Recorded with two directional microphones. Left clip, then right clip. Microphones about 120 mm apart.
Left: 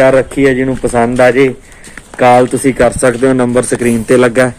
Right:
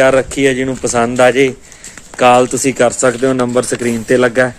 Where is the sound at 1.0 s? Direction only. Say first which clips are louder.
Left 2 dB; 30° right (ahead or behind).